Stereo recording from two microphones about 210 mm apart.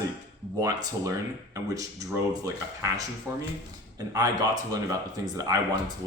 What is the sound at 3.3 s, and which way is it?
Speech, 15° right (ahead or behind).